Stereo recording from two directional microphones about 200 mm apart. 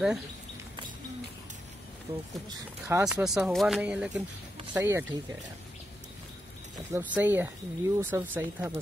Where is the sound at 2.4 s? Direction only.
15° right (ahead or behind).